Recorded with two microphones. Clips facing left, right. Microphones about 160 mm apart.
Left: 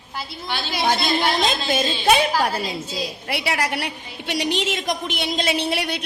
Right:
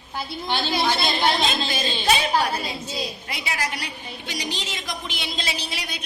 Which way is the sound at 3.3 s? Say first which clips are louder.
Left 10 dB; 65° left (ahead or behind).